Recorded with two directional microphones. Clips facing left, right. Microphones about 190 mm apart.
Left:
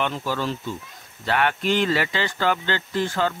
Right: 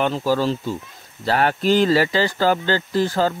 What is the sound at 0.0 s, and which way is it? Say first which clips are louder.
Speech: right 6 dB; 35° right (ahead or behind).